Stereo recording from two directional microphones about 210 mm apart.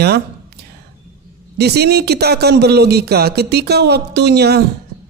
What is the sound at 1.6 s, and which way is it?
Speech, 50° right (ahead or behind).